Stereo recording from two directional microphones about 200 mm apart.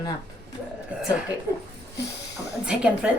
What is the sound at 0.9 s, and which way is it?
Speech, 5° right (ahead or behind).